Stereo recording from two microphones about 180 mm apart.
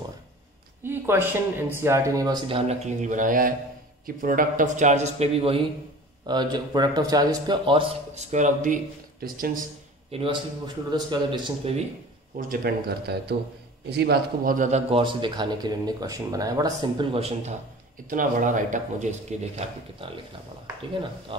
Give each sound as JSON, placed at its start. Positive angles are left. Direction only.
{"t": 0.8, "sound": "a sound", "side_deg": -15}
{"t": 1.7, "sound": "a man's voice", "side_deg": -15}
{"t": 10.1, "sound": "a man's voice", "side_deg": -30}
{"t": 12.4, "sound": "a man's voice", "side_deg": -55}
{"t": 18.1, "sound": "speech", "side_deg": -45}
{"t": 21.3, "sound": "a man's voice", "side_deg": -30}